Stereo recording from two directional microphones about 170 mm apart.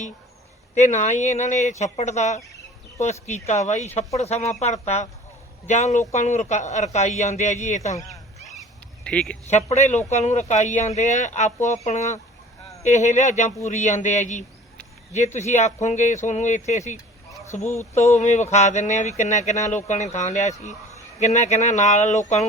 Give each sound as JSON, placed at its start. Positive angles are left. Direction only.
{"t": 0.7, "sound": "speech", "side_deg": 45}
{"t": 9.0, "sound": "speech", "side_deg": 5}
{"t": 9.5, "sound": "speech", "side_deg": 40}